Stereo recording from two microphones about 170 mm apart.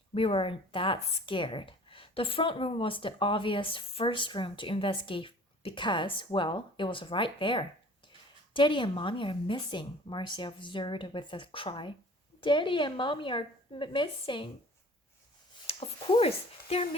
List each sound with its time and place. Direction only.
0.1 s a woman's voice: 35° left (ahead or behind)
15.6 s speech: 35° left (ahead or behind)